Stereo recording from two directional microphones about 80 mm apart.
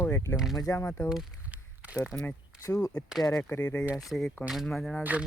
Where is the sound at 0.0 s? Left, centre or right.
Left.